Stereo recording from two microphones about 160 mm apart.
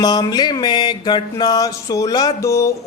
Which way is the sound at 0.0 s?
25° left (ahead or behind).